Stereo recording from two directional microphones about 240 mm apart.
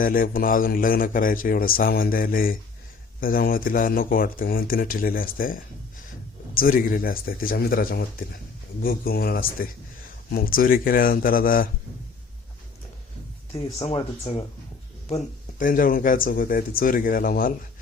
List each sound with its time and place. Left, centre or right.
0.0 s a man's voice: left
13.8 s a man's voice: centre; by 17.5 s left